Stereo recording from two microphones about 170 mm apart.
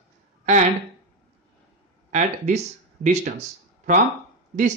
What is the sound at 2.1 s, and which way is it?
Speech, 45° right (ahead or behind).